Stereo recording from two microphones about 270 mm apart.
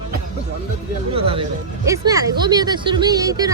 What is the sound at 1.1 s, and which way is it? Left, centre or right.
Speech, right.